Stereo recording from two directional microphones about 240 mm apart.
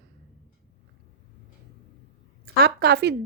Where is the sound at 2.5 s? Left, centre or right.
Right.